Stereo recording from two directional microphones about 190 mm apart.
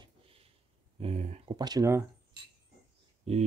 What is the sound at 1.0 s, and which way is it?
Speech, 35° right (ahead or behind).